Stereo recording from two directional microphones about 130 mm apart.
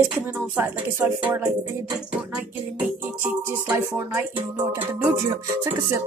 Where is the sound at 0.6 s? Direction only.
10° right (ahead or behind).